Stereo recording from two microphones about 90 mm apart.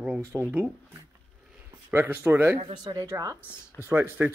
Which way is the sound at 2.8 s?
50° right (ahead or behind).